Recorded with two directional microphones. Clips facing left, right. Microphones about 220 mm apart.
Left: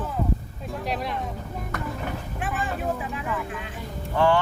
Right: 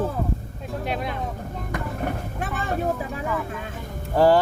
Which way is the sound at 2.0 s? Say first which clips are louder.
Right 3 dB; 40° right (ahead or behind).